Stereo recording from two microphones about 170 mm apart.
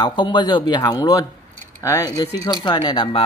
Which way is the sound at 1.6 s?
15° left (ahead or behind).